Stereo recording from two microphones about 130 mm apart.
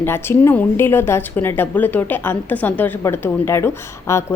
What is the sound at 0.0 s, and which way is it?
A woman's voice, 15° left (ahead or behind).